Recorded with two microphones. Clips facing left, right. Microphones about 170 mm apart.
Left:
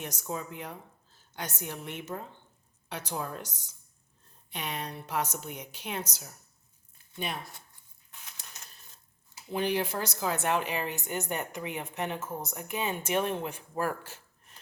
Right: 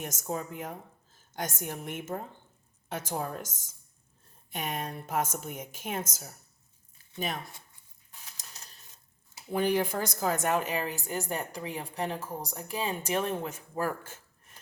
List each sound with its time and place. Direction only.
0.0 s a woman's voice: 45° right (ahead or behind)
8.1 s a sound: 35° right (ahead or behind)
9.5 s a woman's voice: 50° right (ahead or behind)